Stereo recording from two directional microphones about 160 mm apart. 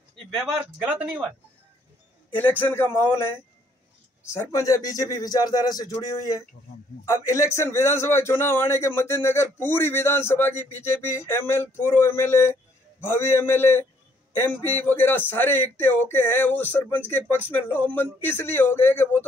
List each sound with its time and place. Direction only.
0.7 s speech: 10° right (ahead or behind)
2.3 s a man's voice: 10° left (ahead or behind)